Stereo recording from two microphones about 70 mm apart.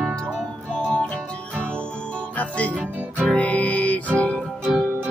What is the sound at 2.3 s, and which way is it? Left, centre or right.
Music, centre.